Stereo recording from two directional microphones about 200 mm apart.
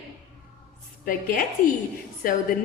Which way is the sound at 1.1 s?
45° left (ahead or behind).